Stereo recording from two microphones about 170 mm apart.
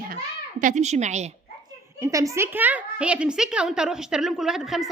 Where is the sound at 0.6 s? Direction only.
45° right (ahead or behind).